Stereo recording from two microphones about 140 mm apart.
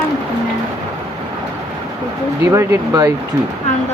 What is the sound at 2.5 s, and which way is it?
Speech, 25° right (ahead or behind).